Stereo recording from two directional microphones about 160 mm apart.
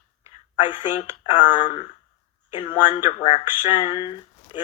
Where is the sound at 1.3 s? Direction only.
45° left (ahead or behind).